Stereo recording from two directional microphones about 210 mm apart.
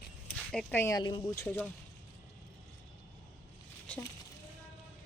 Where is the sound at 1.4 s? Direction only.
10° left (ahead or behind).